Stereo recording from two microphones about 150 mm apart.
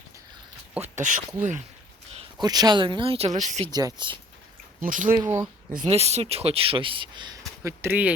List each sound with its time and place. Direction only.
0.9 s speech: 55° right (ahead or behind)
2.4 s speech: 25° right (ahead or behind); by 3.7 s 50° right (ahead or behind)
3.7 s speech: 25° right (ahead or behind)
4.8 s speech: 60° right (ahead or behind)
5.2 s speech: 20° right (ahead or behind)
5.8 s speech: 45° right (ahead or behind); by 8.1 s 10° right (ahead or behind)